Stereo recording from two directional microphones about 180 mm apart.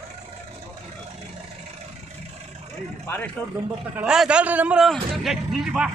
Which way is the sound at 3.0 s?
10° left (ahead or behind).